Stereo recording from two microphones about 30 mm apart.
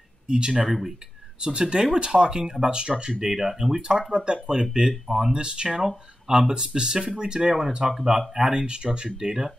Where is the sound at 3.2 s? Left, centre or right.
Centre.